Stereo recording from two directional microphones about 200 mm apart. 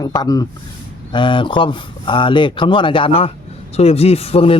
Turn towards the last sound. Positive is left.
turn(degrees=30)  # may be behind; listen again after turning